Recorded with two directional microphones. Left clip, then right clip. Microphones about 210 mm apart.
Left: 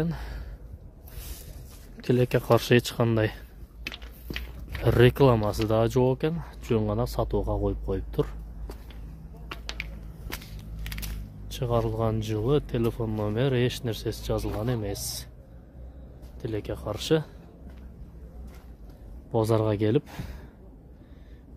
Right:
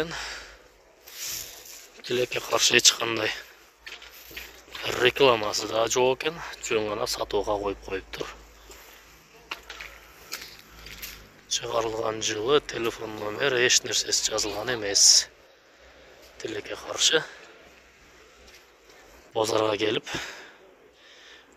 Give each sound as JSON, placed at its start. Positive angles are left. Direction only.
{"t": 0.0, "sound": "a sound", "side_deg": 20}
{"t": 2.1, "sound": "speech", "side_deg": 25}
{"t": 5.0, "sound": "speech", "side_deg": 25}
{"t": 9.5, "sound": "a sound", "side_deg": -15}
{"t": 11.4, "sound": "speech", "side_deg": 10}
{"t": 16.3, "sound": "speech", "side_deg": 0}
{"t": 19.4, "sound": "speech", "side_deg": 5}